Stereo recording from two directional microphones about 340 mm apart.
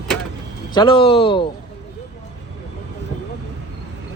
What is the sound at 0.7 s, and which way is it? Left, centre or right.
Speech, centre.